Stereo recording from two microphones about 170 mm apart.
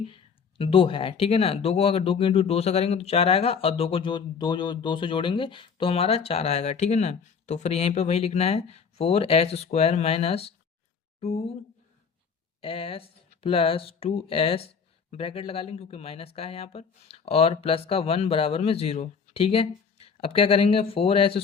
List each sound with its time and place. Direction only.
0.6 s speech: 35° left (ahead or behind)
12.6 s speech: 35° left (ahead or behind)